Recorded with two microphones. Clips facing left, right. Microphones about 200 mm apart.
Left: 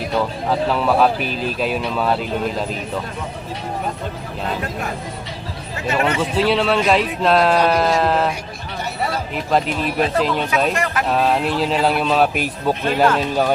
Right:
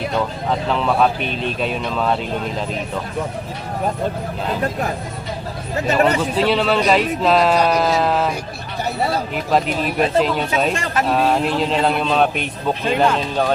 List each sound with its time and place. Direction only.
0.5 s speech: 5° left (ahead or behind)
5.9 s speech: 40° right (ahead or behind)
6.3 s speech: centre (ahead or behind)
9.3 s speech: centre (ahead or behind)
10.8 s speech: 30° right (ahead or behind)
11.1 s speech: centre (ahead or behind)